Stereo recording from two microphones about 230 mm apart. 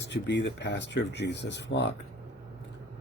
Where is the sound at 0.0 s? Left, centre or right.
Left.